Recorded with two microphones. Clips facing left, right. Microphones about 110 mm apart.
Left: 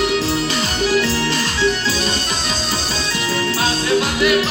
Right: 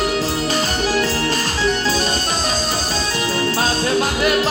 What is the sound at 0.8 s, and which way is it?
Music, 40° right (ahead or behind).